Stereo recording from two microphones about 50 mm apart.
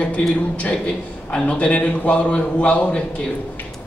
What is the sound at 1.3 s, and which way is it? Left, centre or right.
Speech, centre.